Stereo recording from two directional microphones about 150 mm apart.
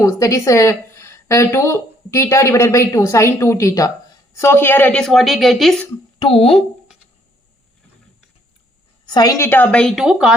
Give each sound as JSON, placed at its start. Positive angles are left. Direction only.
{"t": 0.0, "sound": "speech", "side_deg": 20}
{"t": 6.1, "sound": "speech", "side_deg": 40}
{"t": 9.0, "sound": "a woman's voice", "side_deg": 25}
{"t": 9.9, "sound": "speech", "side_deg": -5}